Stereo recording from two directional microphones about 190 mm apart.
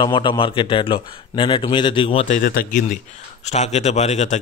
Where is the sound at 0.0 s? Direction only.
25° left (ahead or behind).